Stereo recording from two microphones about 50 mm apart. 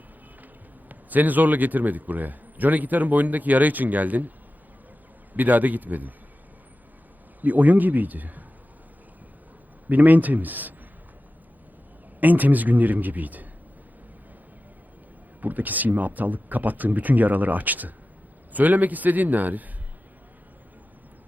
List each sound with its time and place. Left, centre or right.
0.9 s a man's voice: right
5.3 s a man's voice: right
7.4 s a man's voice: right
9.9 s a man's voice: right
12.2 s a man's voice: right
15.4 s a man's voice: right